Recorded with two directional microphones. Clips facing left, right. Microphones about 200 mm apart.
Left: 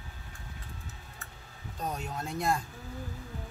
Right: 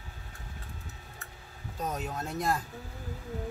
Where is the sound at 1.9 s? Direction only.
5° right (ahead or behind).